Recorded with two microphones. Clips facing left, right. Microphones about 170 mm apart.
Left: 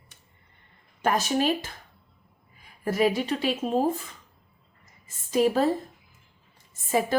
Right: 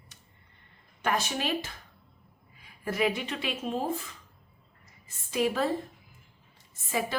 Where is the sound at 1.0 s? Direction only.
40° left (ahead or behind).